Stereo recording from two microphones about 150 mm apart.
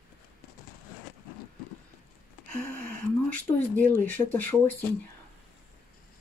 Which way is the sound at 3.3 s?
10° left (ahead or behind).